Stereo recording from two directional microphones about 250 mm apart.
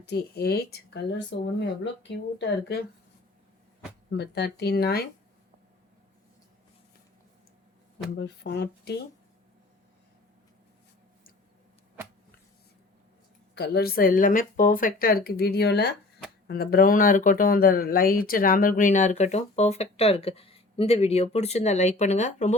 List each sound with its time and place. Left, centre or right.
0.0 s speech: left
4.2 s speech: left
8.2 s speech: left
13.6 s speech: left